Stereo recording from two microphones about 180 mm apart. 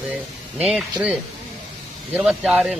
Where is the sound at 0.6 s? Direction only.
Centre (ahead or behind).